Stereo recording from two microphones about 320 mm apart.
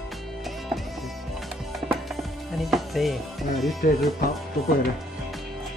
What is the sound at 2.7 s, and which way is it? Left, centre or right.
Speech, centre.